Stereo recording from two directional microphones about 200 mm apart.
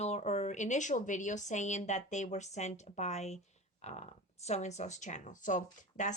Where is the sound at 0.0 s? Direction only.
35° left (ahead or behind).